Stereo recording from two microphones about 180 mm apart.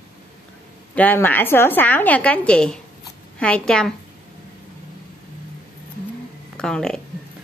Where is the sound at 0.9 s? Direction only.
10° left (ahead or behind).